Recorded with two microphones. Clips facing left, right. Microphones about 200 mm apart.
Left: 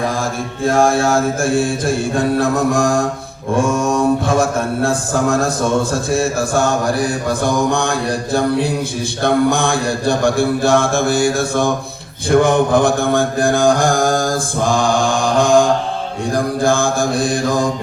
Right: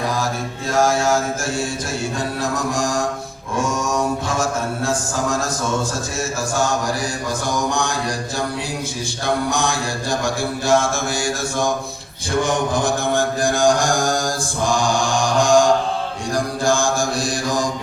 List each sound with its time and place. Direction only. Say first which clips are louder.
0.2 s mantra: left 4 dB; 55° left (ahead or behind)
7.3 s mantra: left 5 dB; 60° left (ahead or behind)